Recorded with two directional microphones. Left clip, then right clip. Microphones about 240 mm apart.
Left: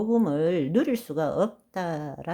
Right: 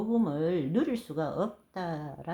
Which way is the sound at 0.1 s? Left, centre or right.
Left.